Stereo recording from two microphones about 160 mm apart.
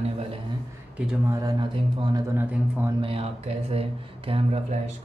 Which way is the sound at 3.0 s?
35° right (ahead or behind).